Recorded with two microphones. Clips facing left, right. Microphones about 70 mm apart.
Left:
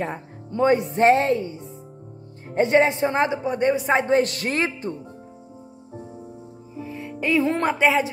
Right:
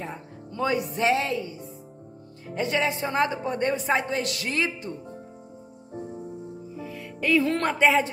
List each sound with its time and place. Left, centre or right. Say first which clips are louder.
0.5 s speech: left 7 dB; left
3.4 s a woman's voice: left 5 dB; centre
3.8 s speech: left 6 dB; left
6.8 s music: left 4 dB; left
7.8 s speech: even; centre